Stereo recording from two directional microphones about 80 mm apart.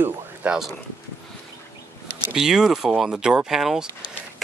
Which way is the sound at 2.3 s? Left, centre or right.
Centre.